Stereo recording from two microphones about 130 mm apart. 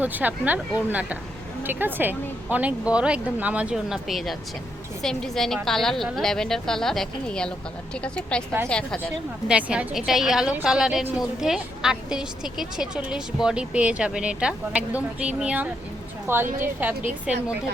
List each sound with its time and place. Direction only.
0.0 s a woman's voice: 15° right (ahead or behind); by 8.9 s 10° left (ahead or behind)
9.5 s a woman's voice: 10° right (ahead or behind)